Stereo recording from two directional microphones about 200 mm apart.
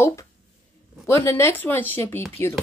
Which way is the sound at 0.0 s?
15° left (ahead or behind).